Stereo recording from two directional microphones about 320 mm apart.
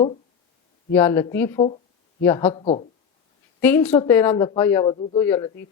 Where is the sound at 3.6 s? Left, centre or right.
Centre.